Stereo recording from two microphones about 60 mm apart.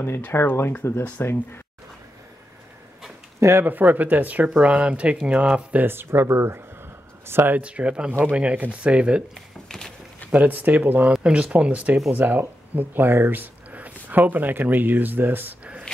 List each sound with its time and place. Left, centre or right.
0.2 s speech: left
1.2 s speech: left
3.3 s speech: right
3.6 s speech: right
5.8 s speech: right
7.5 s speech: right
9.3 s a sound: centre
10.3 s speech: right